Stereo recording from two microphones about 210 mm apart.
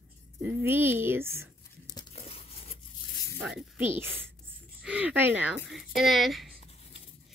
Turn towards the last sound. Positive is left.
turn(degrees=0)  # may be behind; listen again after turning